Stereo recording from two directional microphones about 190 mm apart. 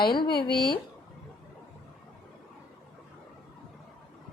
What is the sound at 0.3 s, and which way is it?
Speech, 55° left (ahead or behind).